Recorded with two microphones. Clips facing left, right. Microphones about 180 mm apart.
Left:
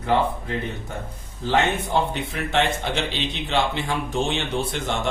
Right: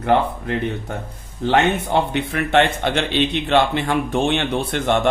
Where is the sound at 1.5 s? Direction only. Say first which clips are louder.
Right 4 dB; 70° right (ahead or behind).